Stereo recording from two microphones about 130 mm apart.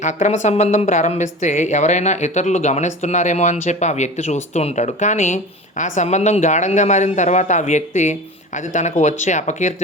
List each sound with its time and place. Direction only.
0.0 s speech: 65° left (ahead or behind)